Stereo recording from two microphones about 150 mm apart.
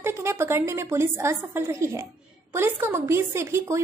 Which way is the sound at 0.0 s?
15° right (ahead or behind).